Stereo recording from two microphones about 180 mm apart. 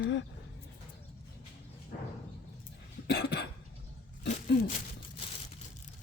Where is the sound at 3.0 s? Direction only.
65° left (ahead or behind).